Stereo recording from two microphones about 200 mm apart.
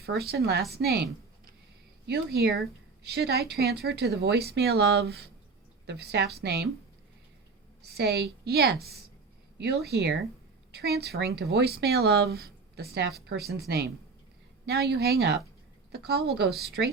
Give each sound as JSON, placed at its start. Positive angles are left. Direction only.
{"t": 0.0, "sound": "speech", "side_deg": -50}
{"t": 2.0, "sound": "speech", "side_deg": -55}
{"t": 7.8, "sound": "speech", "side_deg": -55}
{"t": 16.5, "sound": "speech", "side_deg": 0}